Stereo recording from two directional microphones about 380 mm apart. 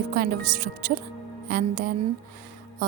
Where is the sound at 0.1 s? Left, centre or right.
Right.